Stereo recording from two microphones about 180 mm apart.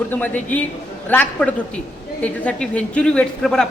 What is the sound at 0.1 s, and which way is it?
A woman's voice, 10° left (ahead or behind).